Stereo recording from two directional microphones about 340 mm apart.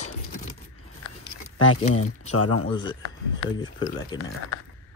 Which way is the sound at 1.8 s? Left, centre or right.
Centre.